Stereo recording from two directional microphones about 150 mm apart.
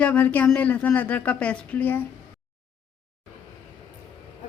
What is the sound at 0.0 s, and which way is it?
A woman's voice, 10° left (ahead or behind).